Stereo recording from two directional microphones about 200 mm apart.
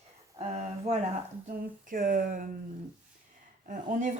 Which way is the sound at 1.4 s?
45° right (ahead or behind).